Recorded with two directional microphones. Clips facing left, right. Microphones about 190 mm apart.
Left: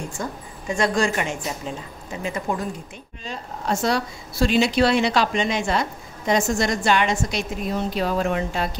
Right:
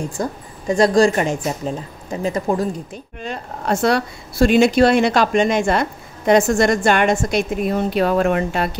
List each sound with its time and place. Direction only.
0.2 s a woman's voice: 35° right (ahead or behind)
3.2 s speech: 60° right (ahead or behind)